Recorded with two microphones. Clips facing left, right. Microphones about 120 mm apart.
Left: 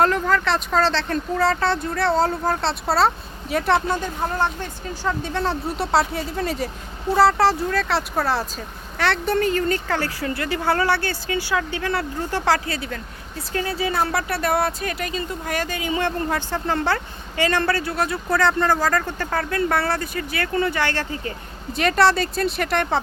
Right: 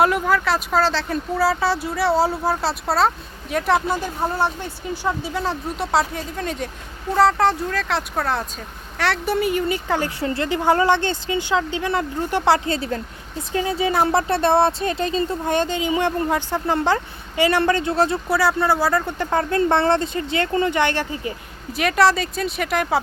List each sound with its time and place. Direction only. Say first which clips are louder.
0.0 s speech: right 1 dB; 10° right (ahead or behind)
10.2 s speech: right 3 dB; 25° right (ahead or behind)
18.3 s speech: even; 10° right (ahead or behind)
21.7 s speech: even; centre (ahead or behind)